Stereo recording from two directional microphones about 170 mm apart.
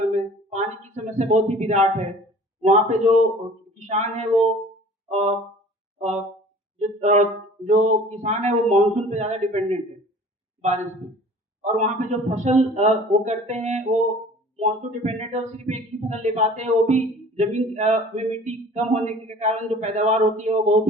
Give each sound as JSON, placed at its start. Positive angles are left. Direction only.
{"t": 0.1, "sound": "a sound", "side_deg": -40}
{"t": 2.6, "sound": "speech", "side_deg": -40}
{"t": 11.6, "sound": "speech", "side_deg": -45}